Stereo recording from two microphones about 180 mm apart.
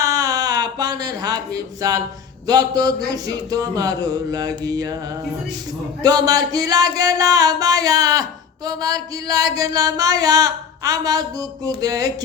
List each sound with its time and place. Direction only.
0.0 s a sound: 20° right (ahead or behind)
2.5 s music: 20° right (ahead or behind)
6.0 s music: 20° right (ahead or behind)